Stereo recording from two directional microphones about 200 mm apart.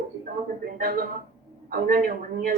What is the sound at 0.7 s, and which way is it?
A woman's voice, 45° right (ahead or behind).